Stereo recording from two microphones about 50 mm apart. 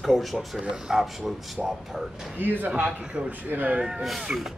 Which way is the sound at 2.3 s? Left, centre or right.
Right.